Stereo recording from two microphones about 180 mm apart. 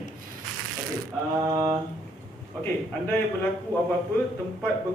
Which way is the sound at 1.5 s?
20° right (ahead or behind).